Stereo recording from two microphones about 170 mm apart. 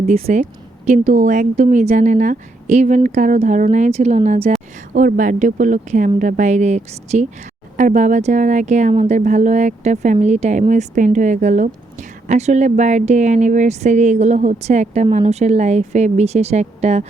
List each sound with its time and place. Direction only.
0.0 s speech: 40° right (ahead or behind)
4.9 s speech: 50° right (ahead or behind)